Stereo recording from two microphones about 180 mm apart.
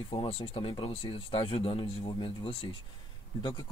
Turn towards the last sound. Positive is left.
turn(degrees=25)  # may be behind; listen again after turning